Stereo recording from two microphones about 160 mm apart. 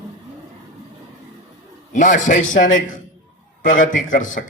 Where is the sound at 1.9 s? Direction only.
50° left (ahead or behind).